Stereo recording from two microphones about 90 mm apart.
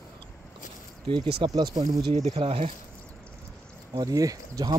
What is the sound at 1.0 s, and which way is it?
Speech, 60° right (ahead or behind).